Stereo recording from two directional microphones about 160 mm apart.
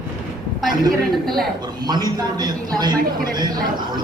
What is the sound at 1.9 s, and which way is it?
Speech, 25° right (ahead or behind).